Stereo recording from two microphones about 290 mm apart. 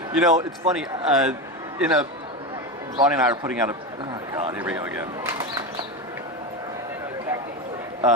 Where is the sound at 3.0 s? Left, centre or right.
Centre.